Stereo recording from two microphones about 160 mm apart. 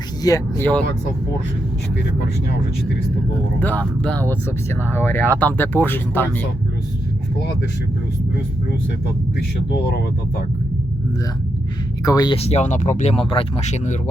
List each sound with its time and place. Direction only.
0.2 s speech: 20° left (ahead or behind)
3.6 s speech: 10° left (ahead or behind)
9.7 s speech: 90° left
12.0 s speech: 25° left (ahead or behind)
12.4 s speech: 40° left (ahead or behind)